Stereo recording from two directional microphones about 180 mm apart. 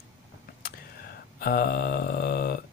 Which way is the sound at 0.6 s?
55° left (ahead or behind).